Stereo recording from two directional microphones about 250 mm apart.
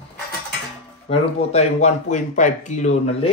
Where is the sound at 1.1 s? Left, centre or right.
Left.